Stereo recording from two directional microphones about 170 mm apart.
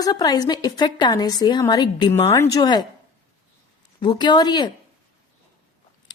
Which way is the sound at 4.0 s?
25° left (ahead or behind).